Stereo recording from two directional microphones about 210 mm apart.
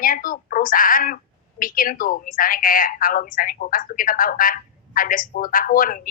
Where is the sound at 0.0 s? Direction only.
40° left (ahead or behind).